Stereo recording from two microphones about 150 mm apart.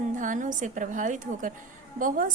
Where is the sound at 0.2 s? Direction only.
60° right (ahead or behind).